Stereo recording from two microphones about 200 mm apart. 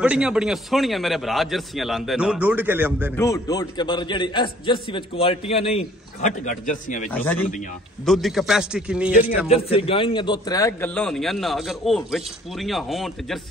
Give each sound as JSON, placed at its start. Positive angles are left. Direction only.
{"t": 0.0, "sound": "a man's voice", "side_deg": -5}
{"t": 3.2, "sound": "a man's voice", "side_deg": 15}
{"t": 7.1, "sound": "a man's voice", "side_deg": 10}
{"t": 9.5, "sound": "a man's voice", "side_deg": 30}
{"t": 11.0, "sound": "a man's voice", "side_deg": 0}